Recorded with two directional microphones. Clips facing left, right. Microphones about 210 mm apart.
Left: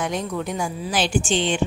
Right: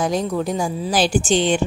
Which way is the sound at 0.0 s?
35° right (ahead or behind).